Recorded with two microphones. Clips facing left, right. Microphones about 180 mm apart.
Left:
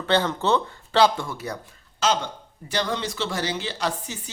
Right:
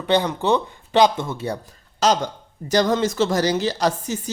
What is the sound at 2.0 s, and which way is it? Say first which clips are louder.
A man's voice: right 4 dB; 40° right (ahead or behind).